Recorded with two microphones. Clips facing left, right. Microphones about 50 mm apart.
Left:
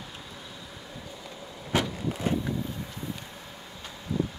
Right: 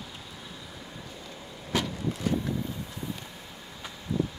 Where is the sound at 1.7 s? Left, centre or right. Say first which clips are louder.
Left 2 dB; left.